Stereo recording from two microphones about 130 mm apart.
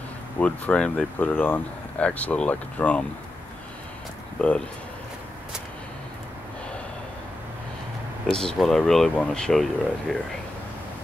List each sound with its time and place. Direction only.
0.4 s speech: 10° left (ahead or behind)
4.4 s speech: 10° left (ahead or behind)
8.3 s speech: 5° left (ahead or behind)